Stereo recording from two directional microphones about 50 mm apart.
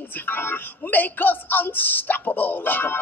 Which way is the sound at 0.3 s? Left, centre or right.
Left.